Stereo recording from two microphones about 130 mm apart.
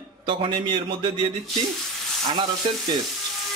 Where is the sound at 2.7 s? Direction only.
45° right (ahead or behind).